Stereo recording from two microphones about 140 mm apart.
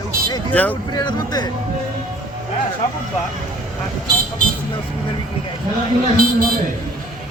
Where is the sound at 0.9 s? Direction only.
30° left (ahead or behind).